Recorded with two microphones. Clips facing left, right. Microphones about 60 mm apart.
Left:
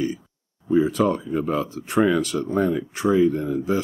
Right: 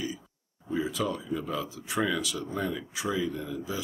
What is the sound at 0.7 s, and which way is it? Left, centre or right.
Speech, left.